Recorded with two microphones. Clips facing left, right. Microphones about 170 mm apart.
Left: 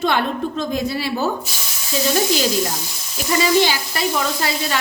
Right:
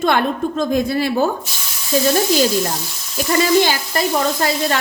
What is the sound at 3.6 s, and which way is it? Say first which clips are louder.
Speech: right 2 dB; 50° right (ahead or behind).